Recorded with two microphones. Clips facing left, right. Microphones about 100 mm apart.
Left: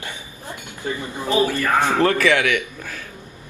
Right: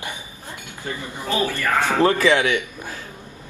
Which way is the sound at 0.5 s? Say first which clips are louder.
Left 4 dB; 20° left (ahead or behind).